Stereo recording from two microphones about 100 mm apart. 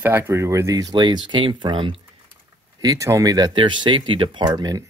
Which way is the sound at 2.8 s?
35° right (ahead or behind).